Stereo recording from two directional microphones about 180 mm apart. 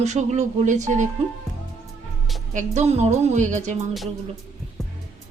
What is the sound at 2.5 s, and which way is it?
Speech, 40° right (ahead or behind).